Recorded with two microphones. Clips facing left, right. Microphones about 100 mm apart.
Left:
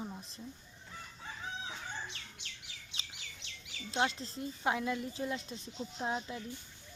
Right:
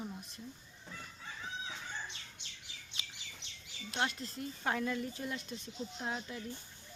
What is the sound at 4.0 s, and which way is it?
Speech, 30° left (ahead or behind).